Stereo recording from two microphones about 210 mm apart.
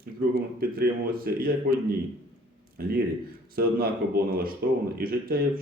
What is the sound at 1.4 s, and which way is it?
Speech, 45° right (ahead or behind).